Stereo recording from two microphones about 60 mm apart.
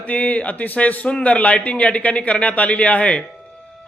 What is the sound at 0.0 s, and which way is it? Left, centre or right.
A man's voice, left.